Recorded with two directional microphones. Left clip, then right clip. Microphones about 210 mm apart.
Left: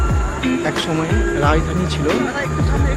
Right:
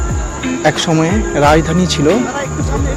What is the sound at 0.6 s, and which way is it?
Speech, 40° right (ahead or behind).